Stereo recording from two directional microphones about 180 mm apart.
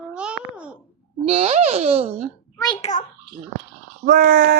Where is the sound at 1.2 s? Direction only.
35° right (ahead or behind).